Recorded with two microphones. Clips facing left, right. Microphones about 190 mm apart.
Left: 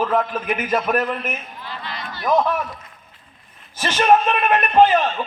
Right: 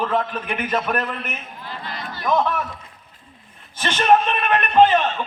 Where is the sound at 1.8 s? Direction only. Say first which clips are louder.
Even; 45° right (ahead or behind).